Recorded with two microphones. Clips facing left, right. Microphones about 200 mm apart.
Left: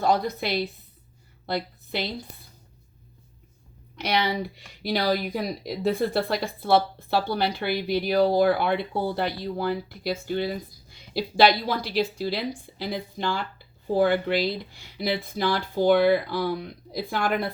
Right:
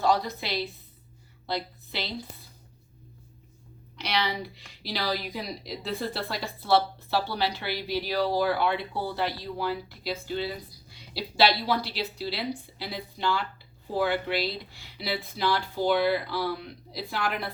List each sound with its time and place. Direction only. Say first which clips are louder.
0.0 s a woman's voice: left 2 dB; 50° left (ahead or behind)
4.0 s a woman's voice: left 4 dB; 50° left (ahead or behind)